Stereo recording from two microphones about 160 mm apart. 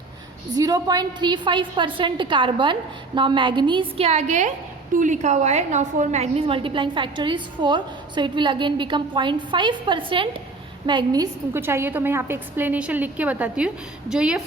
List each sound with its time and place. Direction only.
0.5 s a woman's voice: 25° right (ahead or behind); by 14.4 s 5° right (ahead or behind)